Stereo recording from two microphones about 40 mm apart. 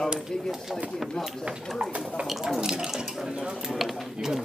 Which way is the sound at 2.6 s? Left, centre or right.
Centre.